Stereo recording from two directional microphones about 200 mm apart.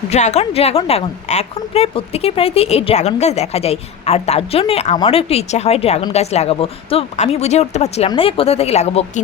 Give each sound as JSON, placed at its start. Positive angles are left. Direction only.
{"t": 0.1, "sound": "a woman's voice", "side_deg": 35}